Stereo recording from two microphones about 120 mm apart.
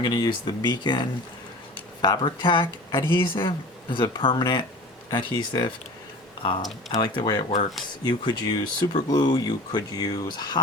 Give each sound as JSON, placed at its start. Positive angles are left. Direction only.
{"t": 0.0, "sound": "speech", "side_deg": 35}